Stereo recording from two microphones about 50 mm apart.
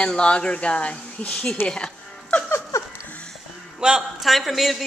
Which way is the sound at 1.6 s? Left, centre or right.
Centre.